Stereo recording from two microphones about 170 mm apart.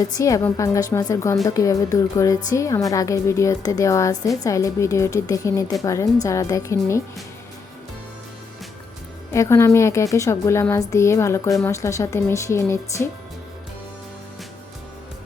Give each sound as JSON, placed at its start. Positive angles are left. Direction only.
{"t": 0.0, "sound": "a woman's voice", "side_deg": 20}
{"t": 9.3, "sound": "a woman's voice", "side_deg": 15}